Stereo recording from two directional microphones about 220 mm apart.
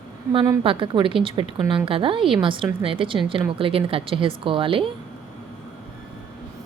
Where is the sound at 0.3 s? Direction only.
20° right (ahead or behind).